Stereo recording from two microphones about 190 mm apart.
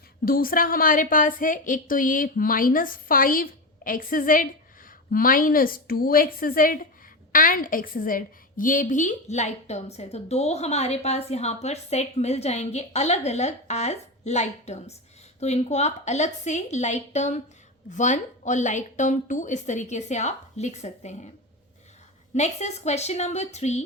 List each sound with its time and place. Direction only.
0.3 s a woman's voice: 50° left (ahead or behind)
22.4 s a woman's voice: 35° left (ahead or behind)